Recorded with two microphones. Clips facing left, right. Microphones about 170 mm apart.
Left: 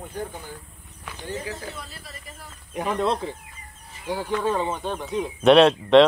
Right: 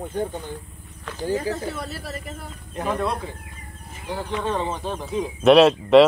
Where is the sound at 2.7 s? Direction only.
20° left (ahead or behind).